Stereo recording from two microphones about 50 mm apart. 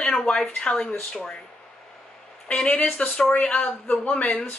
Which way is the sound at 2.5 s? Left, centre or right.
Left.